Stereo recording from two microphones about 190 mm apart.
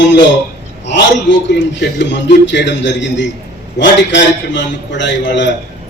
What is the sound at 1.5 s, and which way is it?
A man's voice, 65° left (ahead or behind).